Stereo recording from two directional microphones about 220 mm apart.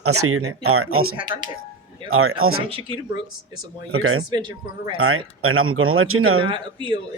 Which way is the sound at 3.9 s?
70° right (ahead or behind).